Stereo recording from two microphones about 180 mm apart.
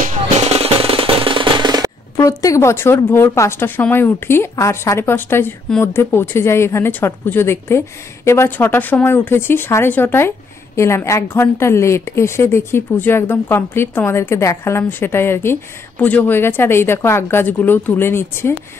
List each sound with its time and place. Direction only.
0.0 s music: 35° right (ahead or behind)
2.1 s a woman's voice: 20° left (ahead or behind)